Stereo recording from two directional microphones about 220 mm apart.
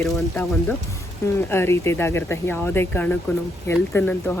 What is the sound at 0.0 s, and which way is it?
Speech, 10° left (ahead or behind).